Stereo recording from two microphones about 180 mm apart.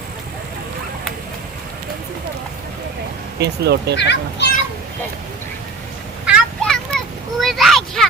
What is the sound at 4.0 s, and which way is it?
Speech, 70° left (ahead or behind).